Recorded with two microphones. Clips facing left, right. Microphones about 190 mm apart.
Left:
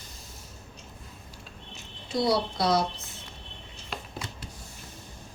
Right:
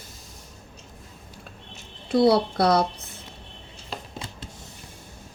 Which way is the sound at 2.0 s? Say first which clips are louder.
Right 7 dB; 60° right (ahead or behind).